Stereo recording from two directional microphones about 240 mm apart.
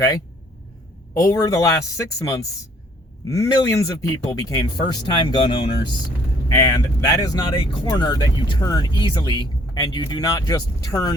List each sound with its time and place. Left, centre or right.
1.2 s speech: centre